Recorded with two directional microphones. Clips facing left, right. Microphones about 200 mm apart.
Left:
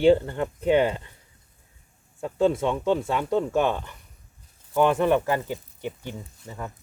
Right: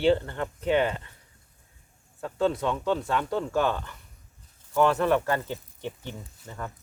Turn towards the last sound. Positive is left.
turn(degrees=10)  # may be behind; listen again after turning